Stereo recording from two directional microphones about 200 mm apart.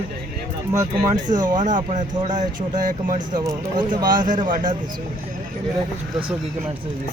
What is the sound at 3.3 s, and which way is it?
Speech, 25° right (ahead or behind).